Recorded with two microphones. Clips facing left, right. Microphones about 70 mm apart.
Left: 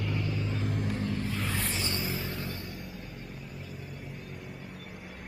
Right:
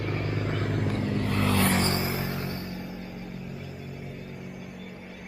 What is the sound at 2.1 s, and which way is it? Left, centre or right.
Vehicle, centre.